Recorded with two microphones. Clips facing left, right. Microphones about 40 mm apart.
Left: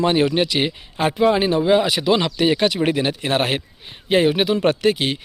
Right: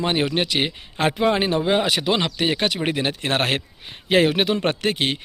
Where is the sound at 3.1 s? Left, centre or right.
Right.